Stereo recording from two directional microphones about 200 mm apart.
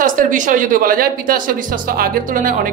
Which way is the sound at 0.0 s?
40° right (ahead or behind).